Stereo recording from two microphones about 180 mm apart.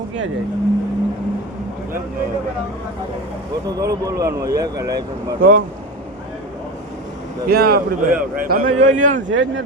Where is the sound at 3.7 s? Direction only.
20° right (ahead or behind).